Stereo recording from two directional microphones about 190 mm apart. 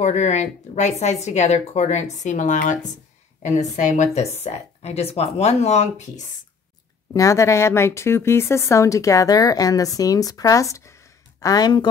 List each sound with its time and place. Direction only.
0.0 s speech: 35° left (ahead or behind)
7.2 s speech: 15° left (ahead or behind)